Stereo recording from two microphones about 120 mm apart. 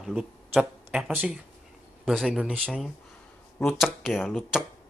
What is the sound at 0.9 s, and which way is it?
Speech, 10° right (ahead or behind).